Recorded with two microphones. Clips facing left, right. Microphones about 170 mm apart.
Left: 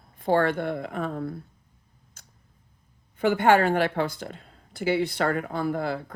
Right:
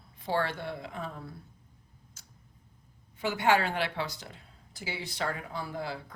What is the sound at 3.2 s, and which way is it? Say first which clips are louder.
A woman's voice: left 7 dB; 55° left (ahead or behind).